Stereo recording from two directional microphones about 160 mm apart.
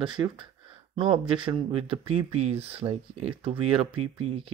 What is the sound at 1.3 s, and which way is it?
Speech, 35° right (ahead or behind).